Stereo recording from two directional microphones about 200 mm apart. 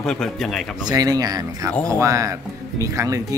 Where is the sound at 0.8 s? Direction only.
20° right (ahead or behind).